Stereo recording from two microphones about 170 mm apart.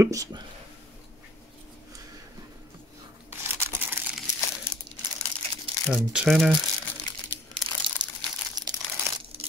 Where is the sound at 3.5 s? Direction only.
10° right (ahead or behind).